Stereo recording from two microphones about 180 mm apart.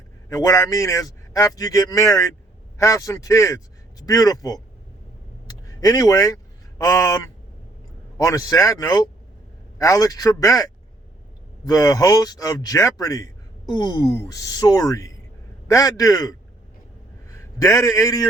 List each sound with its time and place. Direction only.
0.3 s a man's voice: 20° left (ahead or behind)
5.5 s a sound: 20° left (ahead or behind)
8.2 s a man's voice: 20° left (ahead or behind)
17.3 s a man's voice: 15° left (ahead or behind)